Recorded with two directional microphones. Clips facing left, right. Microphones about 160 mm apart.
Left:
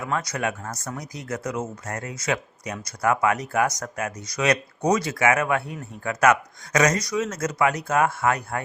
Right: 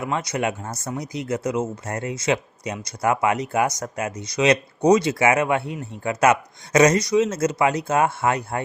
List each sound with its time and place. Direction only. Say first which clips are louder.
0.0 s speech: right 2 dB; 20° right (ahead or behind)